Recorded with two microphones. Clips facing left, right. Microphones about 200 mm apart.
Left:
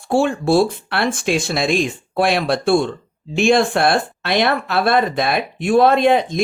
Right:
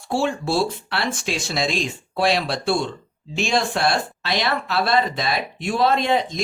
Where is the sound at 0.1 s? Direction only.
55° left (ahead or behind).